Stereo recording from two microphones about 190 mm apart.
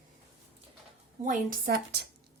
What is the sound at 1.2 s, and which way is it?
Speech, 45° right (ahead or behind).